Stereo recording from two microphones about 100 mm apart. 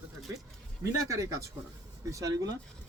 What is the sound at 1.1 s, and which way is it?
Speech, 30° right (ahead or behind).